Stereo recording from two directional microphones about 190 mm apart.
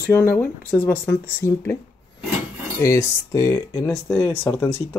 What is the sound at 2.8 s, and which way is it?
Speech, 15° left (ahead or behind).